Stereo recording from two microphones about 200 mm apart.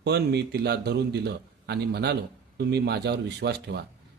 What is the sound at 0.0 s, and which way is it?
Speech, 55° right (ahead or behind).